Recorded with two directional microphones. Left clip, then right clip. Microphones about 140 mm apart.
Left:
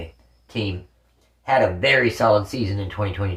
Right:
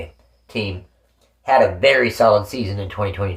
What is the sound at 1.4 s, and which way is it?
Speech, 35° right (ahead or behind).